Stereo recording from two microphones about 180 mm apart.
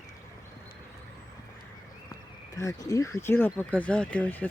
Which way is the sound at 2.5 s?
20° left (ahead or behind).